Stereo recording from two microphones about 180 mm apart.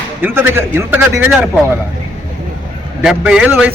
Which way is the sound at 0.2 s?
10° right (ahead or behind).